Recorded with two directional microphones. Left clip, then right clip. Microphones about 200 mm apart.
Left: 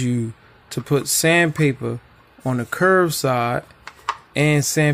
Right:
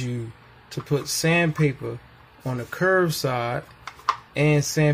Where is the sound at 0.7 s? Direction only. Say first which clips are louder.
Left 5 dB; 45° left (ahead or behind).